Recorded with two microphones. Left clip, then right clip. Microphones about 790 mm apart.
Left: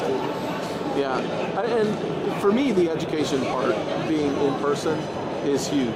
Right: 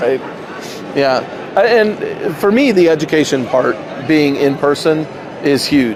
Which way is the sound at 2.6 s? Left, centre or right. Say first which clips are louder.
Right 12 dB; right.